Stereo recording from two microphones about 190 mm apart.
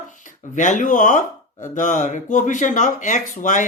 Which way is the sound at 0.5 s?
40° left (ahead or behind).